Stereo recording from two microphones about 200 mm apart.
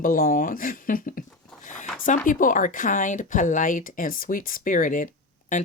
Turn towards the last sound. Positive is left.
turn(degrees=40)  # may be behind; listen again after turning